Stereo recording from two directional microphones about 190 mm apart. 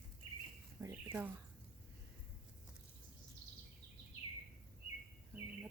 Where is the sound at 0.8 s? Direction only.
15° right (ahead or behind).